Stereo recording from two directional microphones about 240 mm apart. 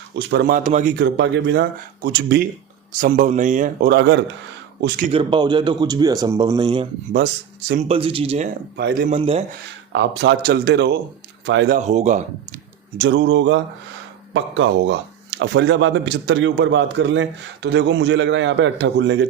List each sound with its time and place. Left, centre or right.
0.3 s speech: right
0.9 s speech: right
4.8 s speech: right
8.7 s speech: right
9.1 s speech: right
9.9 s speech: right
11.8 s speech: right
13.0 s speech: right